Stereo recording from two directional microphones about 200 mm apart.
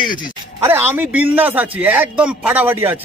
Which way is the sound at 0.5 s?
10° right (ahead or behind).